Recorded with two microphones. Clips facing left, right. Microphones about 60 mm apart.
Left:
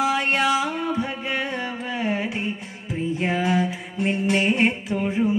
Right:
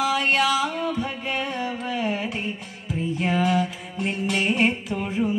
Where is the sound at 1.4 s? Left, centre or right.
Left.